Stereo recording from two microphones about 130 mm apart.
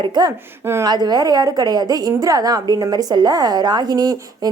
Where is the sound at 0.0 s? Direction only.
35° right (ahead or behind).